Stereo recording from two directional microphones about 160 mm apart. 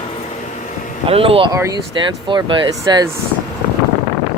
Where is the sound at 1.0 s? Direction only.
35° right (ahead or behind).